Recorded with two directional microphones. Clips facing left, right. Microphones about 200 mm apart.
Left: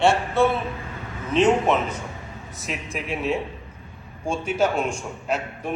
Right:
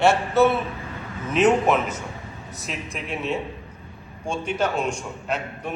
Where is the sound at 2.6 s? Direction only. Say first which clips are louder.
Left 2 dB; centre (ahead or behind).